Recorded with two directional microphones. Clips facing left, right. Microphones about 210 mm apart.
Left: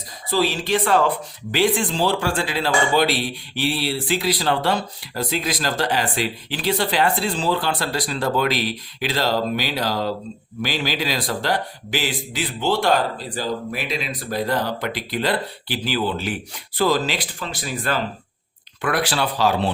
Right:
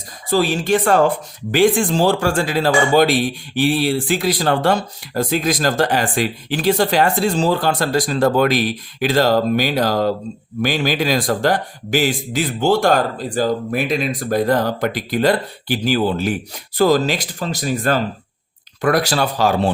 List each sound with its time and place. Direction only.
0.3 s speech: 50° right (ahead or behind)